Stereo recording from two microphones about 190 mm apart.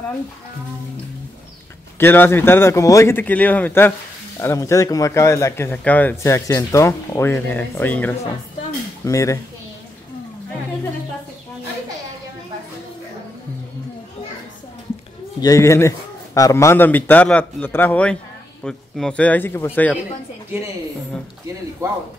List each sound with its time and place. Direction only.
2.0 s speech: 10° left (ahead or behind)
15.4 s speech: 15° left (ahead or behind)
21.8 s a man's voice: 15° right (ahead or behind)